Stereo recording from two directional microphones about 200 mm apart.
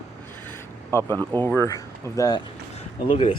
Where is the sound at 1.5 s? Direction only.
15° left (ahead or behind).